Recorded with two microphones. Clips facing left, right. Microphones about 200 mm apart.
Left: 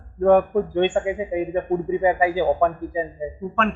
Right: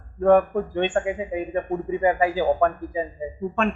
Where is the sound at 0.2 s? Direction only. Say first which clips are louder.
Left 1 dB; centre (ahead or behind).